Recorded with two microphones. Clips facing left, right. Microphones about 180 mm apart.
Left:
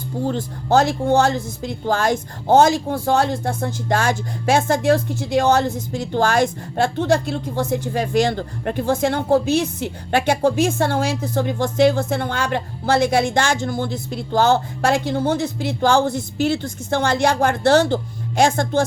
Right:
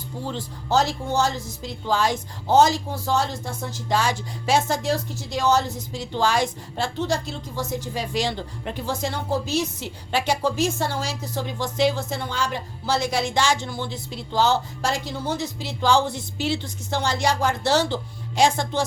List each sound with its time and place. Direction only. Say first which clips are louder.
0.3 s speech: left 6 dB; 55° left (ahead or behind)